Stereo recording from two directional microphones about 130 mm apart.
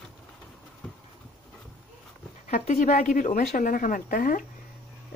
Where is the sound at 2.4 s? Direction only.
70° left (ahead or behind); by 4.5 s 90° left.